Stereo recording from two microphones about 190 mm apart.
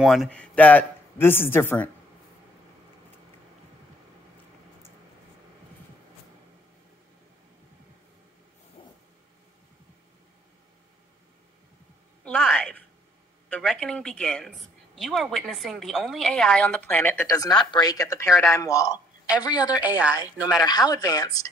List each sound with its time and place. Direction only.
0.0 s speech: centre (ahead or behind)
8.8 s vehicle: 30° left (ahead or behind)
12.3 s a sound: 5° left (ahead or behind)
13.5 s a woman's voice: 5° left (ahead or behind); by 19.8 s 20° left (ahead or behind)
19.8 s a woman's voice: 5° right (ahead or behind)
20.6 s speech: 20° left (ahead or behind)